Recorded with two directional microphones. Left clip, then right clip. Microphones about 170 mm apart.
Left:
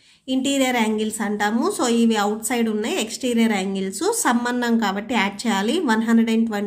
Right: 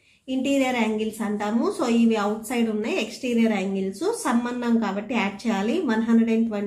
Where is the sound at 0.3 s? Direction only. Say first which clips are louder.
Left 3 dB; 40° left (ahead or behind).